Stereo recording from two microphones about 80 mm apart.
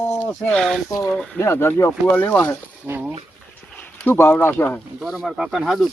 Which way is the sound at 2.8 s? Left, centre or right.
Right.